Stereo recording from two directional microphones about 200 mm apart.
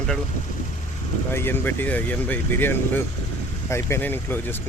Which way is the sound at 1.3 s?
10° left (ahead or behind).